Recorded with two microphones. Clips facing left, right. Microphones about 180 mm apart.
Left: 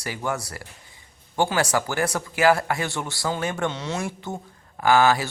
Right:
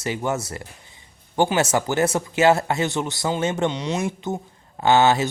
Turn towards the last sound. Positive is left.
turn(degrees=-25)  # may be behind; listen again after turning